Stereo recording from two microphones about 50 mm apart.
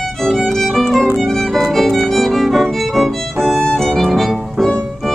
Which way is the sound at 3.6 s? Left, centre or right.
Centre.